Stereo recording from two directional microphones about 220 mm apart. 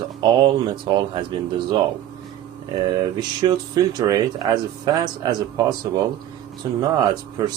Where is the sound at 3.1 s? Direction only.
20° right (ahead or behind).